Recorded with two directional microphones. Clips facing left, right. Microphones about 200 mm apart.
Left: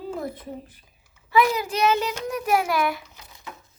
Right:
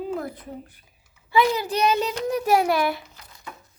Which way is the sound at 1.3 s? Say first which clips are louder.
Even; 30° right (ahead or behind).